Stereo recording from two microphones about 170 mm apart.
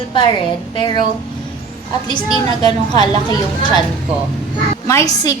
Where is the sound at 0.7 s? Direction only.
30° left (ahead or behind).